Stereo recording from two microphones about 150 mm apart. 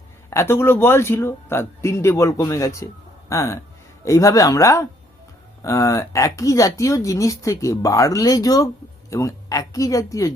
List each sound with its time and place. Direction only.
0.3 s a woman's voice: 15° left (ahead or behind)